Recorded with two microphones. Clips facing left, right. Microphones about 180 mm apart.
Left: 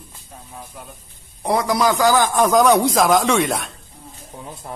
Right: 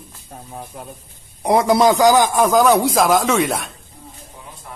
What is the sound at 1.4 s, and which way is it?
A man's voice, 20° right (ahead or behind).